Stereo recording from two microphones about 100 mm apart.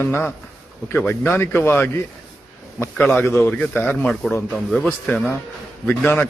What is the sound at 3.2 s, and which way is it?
Speech, 20° left (ahead or behind).